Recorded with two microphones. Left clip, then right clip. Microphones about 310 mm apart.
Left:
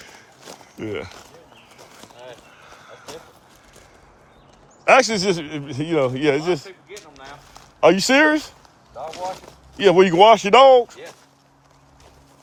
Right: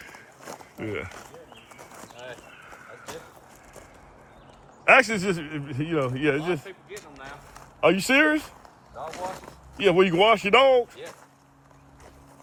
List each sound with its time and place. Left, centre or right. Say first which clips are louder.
0.8 s a man's voice: left 4 dB; centre
4.9 s a man's voice: left 4 dB; centre
6.7 s a sound: left 2 dB; left
7.8 s speech: left 6 dB; left
9.8 s speech: left 7 dB; left